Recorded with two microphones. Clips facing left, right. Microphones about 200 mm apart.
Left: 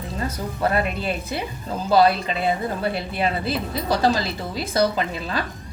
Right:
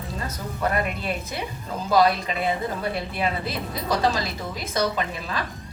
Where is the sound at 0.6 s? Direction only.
30° left (ahead or behind).